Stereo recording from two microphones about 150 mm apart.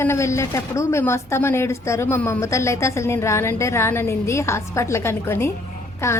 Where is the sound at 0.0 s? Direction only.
20° left (ahead or behind).